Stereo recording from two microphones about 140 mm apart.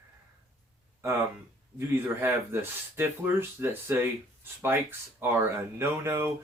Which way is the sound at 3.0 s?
15° right (ahead or behind).